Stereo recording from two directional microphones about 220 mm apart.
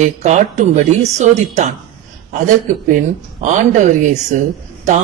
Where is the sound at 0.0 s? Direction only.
30° right (ahead or behind).